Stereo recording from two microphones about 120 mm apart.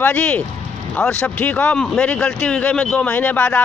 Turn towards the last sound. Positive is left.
turn(degrees=15)  # may be behind; listen again after turning